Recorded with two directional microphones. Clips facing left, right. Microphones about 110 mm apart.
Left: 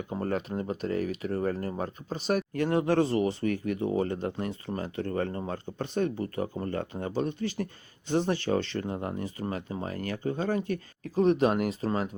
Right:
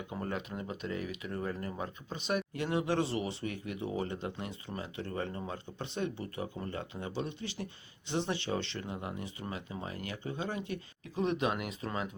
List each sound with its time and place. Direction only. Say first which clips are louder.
0.1 s speech: left 8 dB; 40° left (ahead or behind)